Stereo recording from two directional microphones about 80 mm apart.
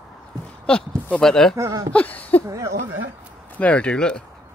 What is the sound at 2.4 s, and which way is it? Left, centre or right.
Speech, right.